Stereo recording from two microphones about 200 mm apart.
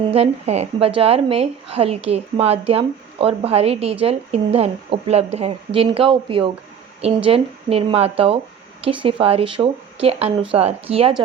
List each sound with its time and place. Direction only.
0.1 s a woman's voice: 30° right (ahead or behind)